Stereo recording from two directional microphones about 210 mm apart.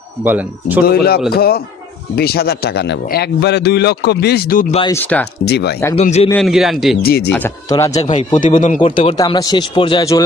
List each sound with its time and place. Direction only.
0.2 s speech: 10° right (ahead or behind)
0.8 s a man's voice: 45° left (ahead or behind)
4.9 s speech: 10° left (ahead or behind)
5.4 s a man's voice: 50° left (ahead or behind)
5.9 s speech: 30° left (ahead or behind)
6.3 s a man's voice: centre (ahead or behind)
7.0 s a man's voice: 45° left (ahead or behind)
7.2 s speech: 10° left (ahead or behind)
7.9 s speech: 35° left (ahead or behind)
8.8 s speech: 25° left (ahead or behind)